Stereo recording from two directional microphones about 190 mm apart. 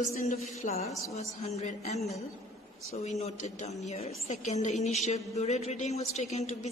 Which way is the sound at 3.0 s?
35° left (ahead or behind).